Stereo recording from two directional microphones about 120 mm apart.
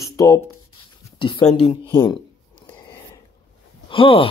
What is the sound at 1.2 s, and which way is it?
Speech, 45° left (ahead or behind).